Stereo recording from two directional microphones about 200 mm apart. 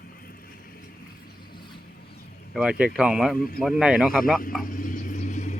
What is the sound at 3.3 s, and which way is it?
Speech, 45° left (ahead or behind).